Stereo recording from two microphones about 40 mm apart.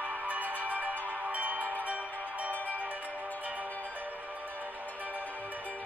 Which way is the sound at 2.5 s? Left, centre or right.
Left.